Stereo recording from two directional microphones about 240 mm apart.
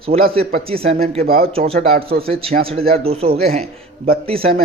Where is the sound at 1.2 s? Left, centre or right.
Right.